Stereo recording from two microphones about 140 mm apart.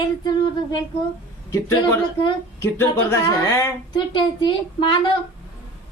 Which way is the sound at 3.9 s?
35° left (ahead or behind).